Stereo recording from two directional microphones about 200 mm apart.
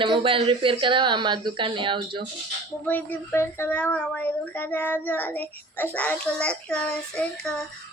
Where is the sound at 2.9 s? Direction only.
10° left (ahead or behind).